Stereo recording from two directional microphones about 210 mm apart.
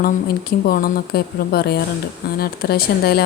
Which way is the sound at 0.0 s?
45° left (ahead or behind).